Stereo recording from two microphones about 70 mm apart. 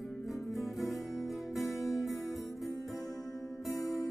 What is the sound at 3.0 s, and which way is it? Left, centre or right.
Music, left.